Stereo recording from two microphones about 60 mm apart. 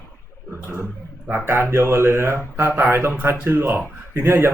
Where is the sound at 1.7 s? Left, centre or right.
Right.